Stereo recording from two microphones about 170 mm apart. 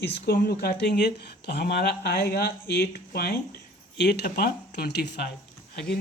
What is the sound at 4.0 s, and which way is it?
Speech, 80° left.